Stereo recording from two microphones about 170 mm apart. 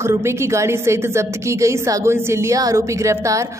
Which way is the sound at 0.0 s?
15° right (ahead or behind).